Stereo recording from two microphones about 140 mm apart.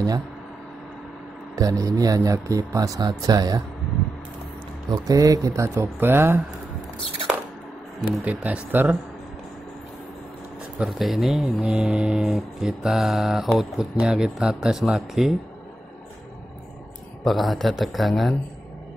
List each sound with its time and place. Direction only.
1.5 s speech: 25° right (ahead or behind)
4.9 s speech: 25° right (ahead or behind)
8.1 s speech: 5° right (ahead or behind)
10.8 s speech: centre (ahead or behind)
17.2 s speech: centre (ahead or behind)